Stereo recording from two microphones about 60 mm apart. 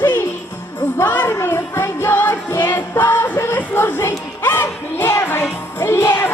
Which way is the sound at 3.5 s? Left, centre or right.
Left.